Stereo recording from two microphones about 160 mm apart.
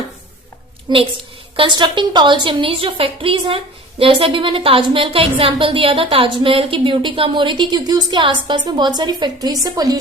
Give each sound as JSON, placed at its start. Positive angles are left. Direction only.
{"t": 0.9, "sound": "a woman's voice", "side_deg": -35}